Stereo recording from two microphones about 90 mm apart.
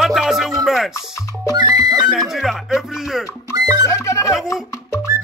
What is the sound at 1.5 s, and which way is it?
Music, 50° right (ahead or behind).